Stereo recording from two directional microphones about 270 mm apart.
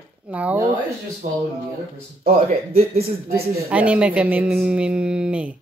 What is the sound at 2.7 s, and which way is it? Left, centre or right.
Speech, right.